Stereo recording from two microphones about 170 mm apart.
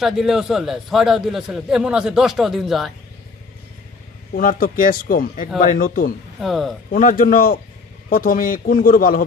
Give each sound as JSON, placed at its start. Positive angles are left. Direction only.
{"t": 0.0, "sound": "a man's voice", "side_deg": 0}
{"t": 4.4, "sound": "a man's voice", "side_deg": 55}
{"t": 6.4, "sound": "a man's voice", "side_deg": 0}
{"t": 6.9, "sound": "a man's voice", "side_deg": 55}